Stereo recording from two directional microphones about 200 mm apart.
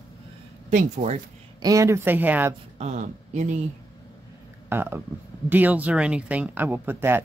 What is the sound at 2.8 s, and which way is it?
Speech, 35° right (ahead or behind).